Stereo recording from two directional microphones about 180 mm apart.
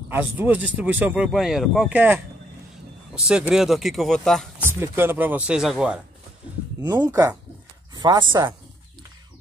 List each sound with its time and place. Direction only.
0.1 s speech: 10° right (ahead or behind)
3.3 s speech: 5° right (ahead or behind)
4.6 s speech: 15° right (ahead or behind)
6.8 s speech: 20° right (ahead or behind)